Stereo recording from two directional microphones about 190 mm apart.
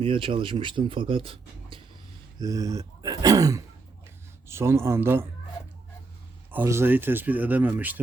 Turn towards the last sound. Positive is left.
turn(degrees=-10)  # may be behind; listen again after turning